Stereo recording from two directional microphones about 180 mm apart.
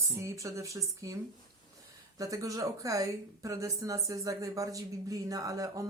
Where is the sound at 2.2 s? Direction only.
20° right (ahead or behind).